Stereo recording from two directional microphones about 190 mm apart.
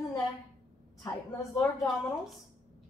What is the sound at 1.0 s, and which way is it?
Speech, 20° left (ahead or behind).